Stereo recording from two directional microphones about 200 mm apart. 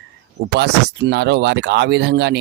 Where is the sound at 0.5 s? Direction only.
55° right (ahead or behind).